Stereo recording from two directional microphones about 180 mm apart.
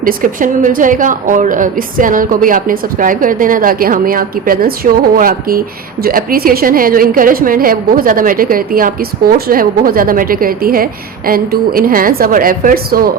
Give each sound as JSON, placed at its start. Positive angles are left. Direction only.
{"t": 0.0, "sound": "a woman's voice", "side_deg": -50}